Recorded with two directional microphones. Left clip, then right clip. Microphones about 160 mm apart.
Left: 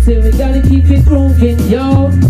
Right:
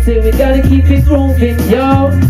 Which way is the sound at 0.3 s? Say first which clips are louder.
Right 7 dB; 40° left (ahead or behind).